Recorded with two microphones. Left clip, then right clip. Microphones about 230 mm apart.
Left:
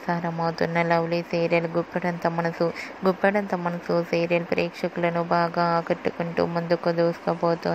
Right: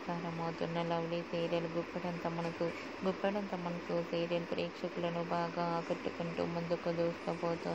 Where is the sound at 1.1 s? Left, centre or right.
Left.